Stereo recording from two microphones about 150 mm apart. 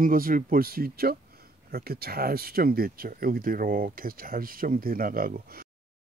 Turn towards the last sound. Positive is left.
turn(degrees=-80)